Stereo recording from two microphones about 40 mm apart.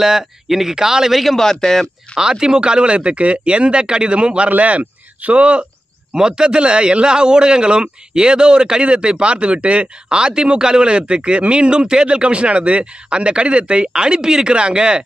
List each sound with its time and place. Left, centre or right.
0.0 s speech: centre
1.2 s a man's voice: centre
2.1 s a man's voice: centre